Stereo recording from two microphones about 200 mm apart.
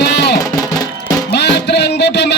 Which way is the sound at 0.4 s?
15° left (ahead or behind).